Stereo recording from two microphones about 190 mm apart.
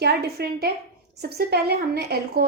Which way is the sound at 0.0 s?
55° right (ahead or behind).